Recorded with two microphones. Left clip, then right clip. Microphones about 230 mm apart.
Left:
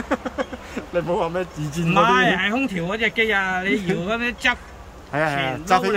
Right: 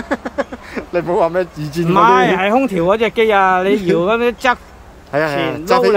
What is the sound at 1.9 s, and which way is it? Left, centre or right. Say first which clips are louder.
Speech: right 6 dB; centre.